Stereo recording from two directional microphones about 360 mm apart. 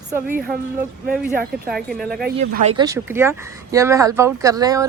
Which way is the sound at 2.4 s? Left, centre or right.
Right.